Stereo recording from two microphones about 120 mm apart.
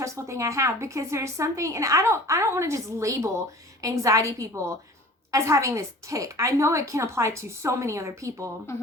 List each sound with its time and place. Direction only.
0.0 s a woman's voice: 25° right (ahead or behind)